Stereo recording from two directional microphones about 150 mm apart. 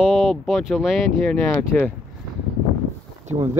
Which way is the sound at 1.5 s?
15° left (ahead or behind).